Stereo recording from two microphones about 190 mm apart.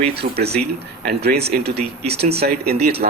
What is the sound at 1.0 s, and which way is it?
Speech, 55° right (ahead or behind).